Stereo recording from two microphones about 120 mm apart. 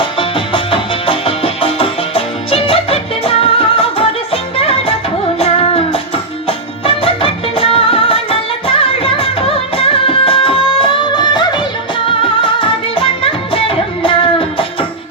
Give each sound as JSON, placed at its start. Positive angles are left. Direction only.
{"t": 0.0, "sound": "music", "side_deg": 45}
{"t": 5.4, "sound": "child singing", "side_deg": 55}
{"t": 6.8, "sound": "music", "side_deg": 50}
{"t": 11.0, "sound": "music", "side_deg": 40}